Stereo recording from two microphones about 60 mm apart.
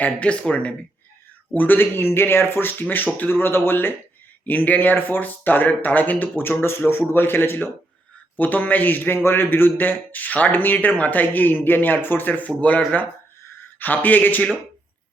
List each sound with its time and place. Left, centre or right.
0.0 s speech: centre
1.5 s a man's voice: left
4.4 s a man's voice: left